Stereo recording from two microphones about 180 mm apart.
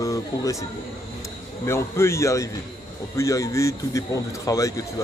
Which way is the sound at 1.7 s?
15° left (ahead or behind).